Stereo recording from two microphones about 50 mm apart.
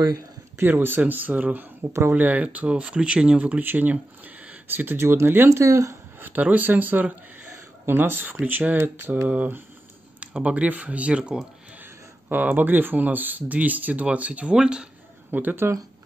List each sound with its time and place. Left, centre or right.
0.6 s speech: right
1.8 s speech: right
2.1 s speech: right
4.6 s mantra: right
4.9 s speech: right
5.5 s speech: right
6.2 s speech: right
8.7 s mantra: right
9.3 s speech: right
12.3 s speech: right
14.5 s speech: centre
15.3 s speech: right